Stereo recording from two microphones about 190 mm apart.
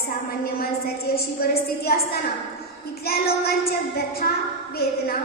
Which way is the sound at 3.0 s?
55° left (ahead or behind).